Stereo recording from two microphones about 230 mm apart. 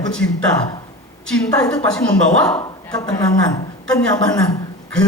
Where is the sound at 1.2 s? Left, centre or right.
Centre.